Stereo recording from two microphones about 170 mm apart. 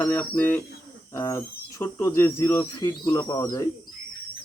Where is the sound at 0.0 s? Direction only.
10° left (ahead or behind).